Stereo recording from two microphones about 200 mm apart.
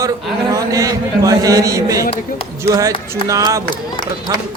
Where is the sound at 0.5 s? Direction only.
15° right (ahead or behind).